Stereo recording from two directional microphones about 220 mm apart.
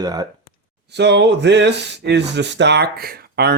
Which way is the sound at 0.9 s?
50° right (ahead or behind).